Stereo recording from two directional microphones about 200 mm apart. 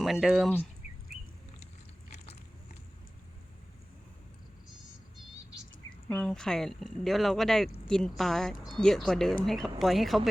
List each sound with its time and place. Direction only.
0.0 s speech: centre (ahead or behind)
6.1 s speech: 5° left (ahead or behind)